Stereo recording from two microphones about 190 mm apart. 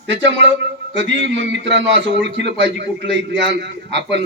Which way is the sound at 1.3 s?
70° right (ahead or behind).